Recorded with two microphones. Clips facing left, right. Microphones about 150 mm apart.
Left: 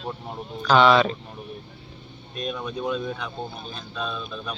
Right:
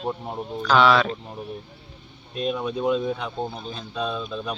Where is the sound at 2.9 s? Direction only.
25° right (ahead or behind).